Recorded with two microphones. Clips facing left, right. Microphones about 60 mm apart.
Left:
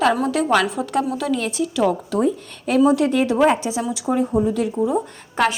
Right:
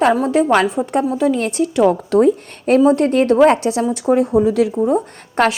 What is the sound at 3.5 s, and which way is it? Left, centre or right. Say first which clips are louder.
Speech: right 5 dB; right.